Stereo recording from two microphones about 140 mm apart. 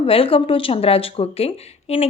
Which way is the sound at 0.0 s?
40° left (ahead or behind).